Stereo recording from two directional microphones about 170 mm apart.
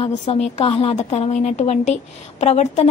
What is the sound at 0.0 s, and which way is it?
A woman's voice, 35° left (ahead or behind).